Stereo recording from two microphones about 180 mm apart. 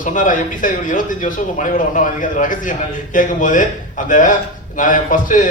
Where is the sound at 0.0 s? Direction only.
45° left (ahead or behind).